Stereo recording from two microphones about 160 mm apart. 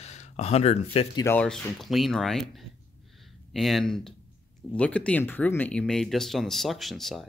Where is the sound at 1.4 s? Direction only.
Centre (ahead or behind).